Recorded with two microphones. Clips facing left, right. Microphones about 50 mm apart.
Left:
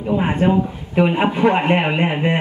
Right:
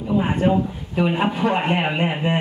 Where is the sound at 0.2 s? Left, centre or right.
Left.